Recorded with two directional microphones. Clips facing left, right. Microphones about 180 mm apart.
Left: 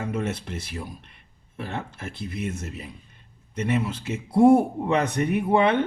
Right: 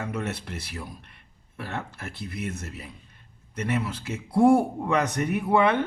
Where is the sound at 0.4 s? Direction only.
25° left (ahead or behind).